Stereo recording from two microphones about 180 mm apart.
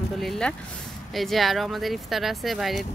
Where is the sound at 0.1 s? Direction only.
Centre (ahead or behind).